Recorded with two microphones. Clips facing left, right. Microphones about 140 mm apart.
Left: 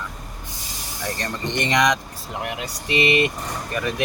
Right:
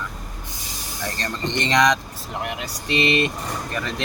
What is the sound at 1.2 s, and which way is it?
Speech, 15° left (ahead or behind).